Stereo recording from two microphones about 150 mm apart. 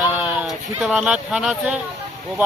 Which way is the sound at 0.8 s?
5° right (ahead or behind).